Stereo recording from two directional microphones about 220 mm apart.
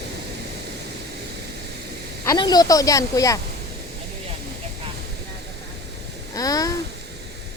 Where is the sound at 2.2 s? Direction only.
20° left (ahead or behind).